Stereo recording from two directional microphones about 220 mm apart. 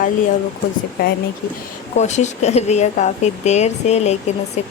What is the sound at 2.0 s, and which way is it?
Speech, 30° left (ahead or behind).